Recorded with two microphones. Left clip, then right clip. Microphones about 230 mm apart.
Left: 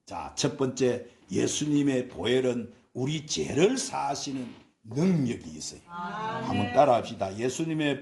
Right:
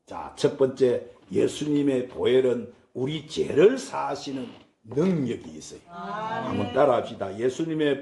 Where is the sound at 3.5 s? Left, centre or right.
Left.